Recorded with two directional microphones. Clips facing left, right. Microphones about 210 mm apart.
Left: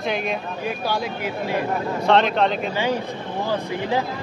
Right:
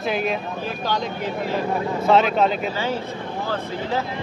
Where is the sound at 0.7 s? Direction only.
10° left (ahead or behind).